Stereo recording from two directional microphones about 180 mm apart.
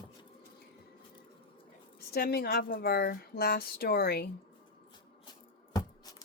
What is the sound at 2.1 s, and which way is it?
Speech, 60° left (ahead or behind).